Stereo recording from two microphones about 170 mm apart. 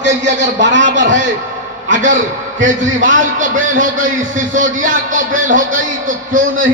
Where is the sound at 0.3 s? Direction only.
90° right.